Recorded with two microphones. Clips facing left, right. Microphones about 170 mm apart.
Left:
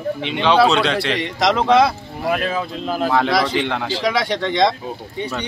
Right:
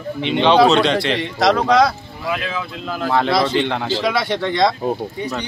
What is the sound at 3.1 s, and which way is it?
Speech, 5° left (ahead or behind).